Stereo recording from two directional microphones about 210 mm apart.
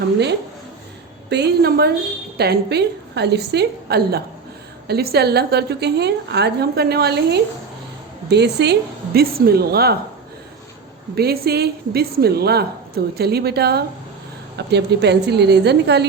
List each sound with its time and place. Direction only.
1.3 s a woman's voice: 50° right (ahead or behind)
11.1 s a woman's voice: 50° right (ahead or behind)